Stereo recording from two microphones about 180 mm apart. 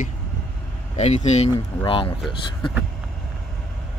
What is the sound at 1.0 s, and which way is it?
Speech, 35° left (ahead or behind).